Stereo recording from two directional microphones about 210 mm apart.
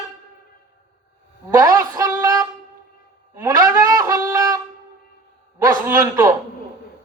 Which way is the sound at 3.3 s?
15° right (ahead or behind).